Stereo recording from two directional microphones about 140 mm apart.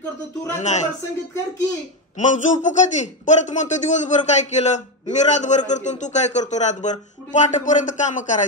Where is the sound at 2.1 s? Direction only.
60° left (ahead or behind).